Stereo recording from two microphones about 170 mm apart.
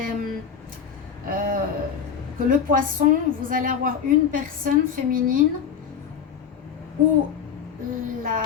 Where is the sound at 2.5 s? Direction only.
50° right (ahead or behind).